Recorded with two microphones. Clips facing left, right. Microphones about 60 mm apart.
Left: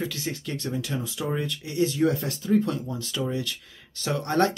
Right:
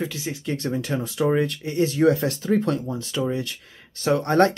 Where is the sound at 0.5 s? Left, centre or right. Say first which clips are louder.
Right 7 dB; right.